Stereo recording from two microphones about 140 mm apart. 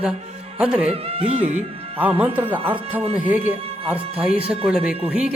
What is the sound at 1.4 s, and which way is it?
Speech, 10° right (ahead or behind).